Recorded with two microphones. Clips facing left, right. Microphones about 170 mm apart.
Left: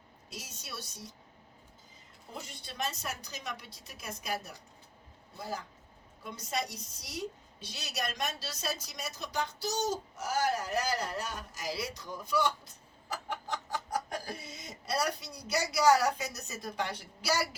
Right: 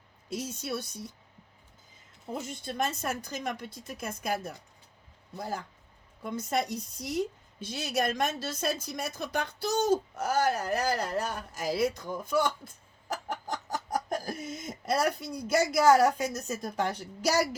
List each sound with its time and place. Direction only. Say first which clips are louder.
0.3 s speech: right 12 dB; 55° right (ahead or behind)
2.3 s speech: right 9 dB; 50° right (ahead or behind)
6.2 s speech: right 6 dB; 50° right (ahead or behind)